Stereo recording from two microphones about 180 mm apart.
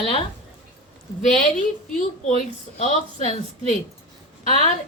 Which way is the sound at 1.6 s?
40° left (ahead or behind).